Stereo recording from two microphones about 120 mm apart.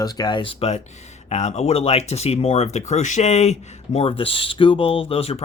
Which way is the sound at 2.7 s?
75° left (ahead or behind).